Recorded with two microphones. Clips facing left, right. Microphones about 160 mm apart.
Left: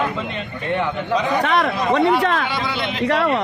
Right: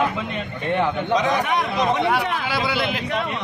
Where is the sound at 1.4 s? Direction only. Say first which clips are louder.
Left 2 dB; 75° left (ahead or behind).